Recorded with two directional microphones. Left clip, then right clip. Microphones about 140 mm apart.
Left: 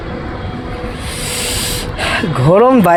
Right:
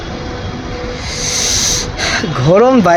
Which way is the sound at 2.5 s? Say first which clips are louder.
Even; 15° left (ahead or behind).